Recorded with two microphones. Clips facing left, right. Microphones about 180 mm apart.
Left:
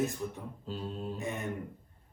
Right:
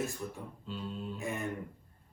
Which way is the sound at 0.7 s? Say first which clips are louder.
Left 2 dB; 40° left (ahead or behind).